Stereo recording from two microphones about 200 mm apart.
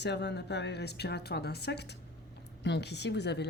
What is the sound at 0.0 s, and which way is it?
A woman's voice, 55° left (ahead or behind).